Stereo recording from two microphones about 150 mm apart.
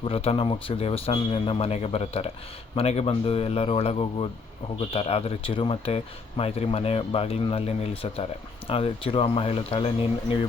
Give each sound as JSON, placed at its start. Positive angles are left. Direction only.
{"t": 0.0, "sound": "speech", "side_deg": 40}